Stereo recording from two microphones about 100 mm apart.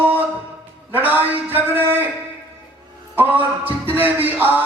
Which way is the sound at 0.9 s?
20° right (ahead or behind).